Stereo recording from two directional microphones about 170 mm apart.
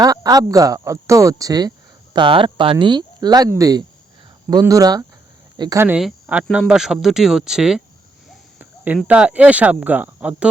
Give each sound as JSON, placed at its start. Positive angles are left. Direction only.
{"t": 0.0, "sound": "speech", "side_deg": -20}
{"t": 8.3, "sound": "a sound", "side_deg": -10}
{"t": 9.0, "sound": "speech", "side_deg": -10}